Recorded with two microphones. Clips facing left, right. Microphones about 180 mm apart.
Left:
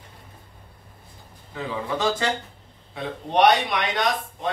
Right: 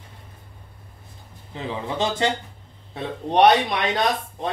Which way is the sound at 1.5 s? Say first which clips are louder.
Even; 25° right (ahead or behind).